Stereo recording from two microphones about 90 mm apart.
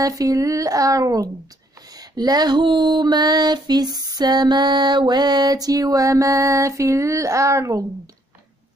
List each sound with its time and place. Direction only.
0.0 s speech: 40° right (ahead or behind)
2.0 s a sound: 45° right (ahead or behind)
6.8 s speech: 35° right (ahead or behind)